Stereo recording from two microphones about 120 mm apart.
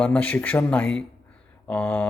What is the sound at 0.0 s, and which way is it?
Speech, 10° left (ahead or behind).